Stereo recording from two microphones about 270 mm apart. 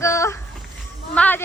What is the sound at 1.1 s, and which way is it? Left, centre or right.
Speech, centre.